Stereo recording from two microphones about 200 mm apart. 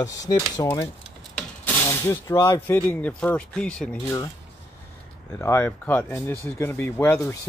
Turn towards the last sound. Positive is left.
turn(degrees=10)  # may be behind; listen again after turning